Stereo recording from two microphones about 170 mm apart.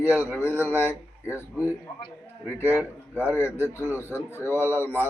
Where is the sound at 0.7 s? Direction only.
15° left (ahead or behind).